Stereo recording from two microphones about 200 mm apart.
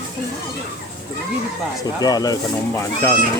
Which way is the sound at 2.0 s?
20° left (ahead or behind).